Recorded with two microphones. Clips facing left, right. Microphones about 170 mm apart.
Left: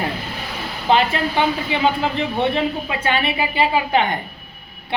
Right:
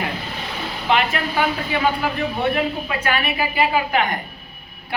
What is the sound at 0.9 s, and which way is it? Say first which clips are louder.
A woman's voice: left 3 dB; 30° left (ahead or behind).